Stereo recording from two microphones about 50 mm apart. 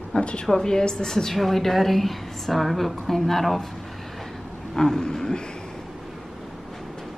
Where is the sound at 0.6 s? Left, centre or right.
Centre.